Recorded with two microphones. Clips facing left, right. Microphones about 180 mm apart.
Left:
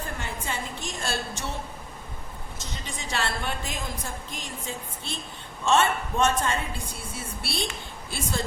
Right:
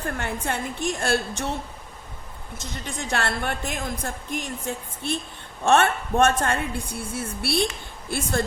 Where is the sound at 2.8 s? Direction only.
55° right (ahead or behind).